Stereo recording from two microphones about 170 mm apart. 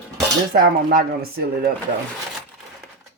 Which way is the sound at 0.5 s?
60° right (ahead or behind).